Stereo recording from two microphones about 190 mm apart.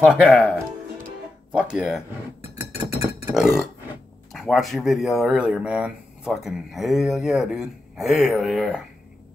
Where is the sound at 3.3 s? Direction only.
5° right (ahead or behind).